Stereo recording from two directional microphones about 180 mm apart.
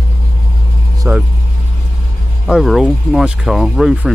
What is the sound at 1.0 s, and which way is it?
Speech, 10° right (ahead or behind).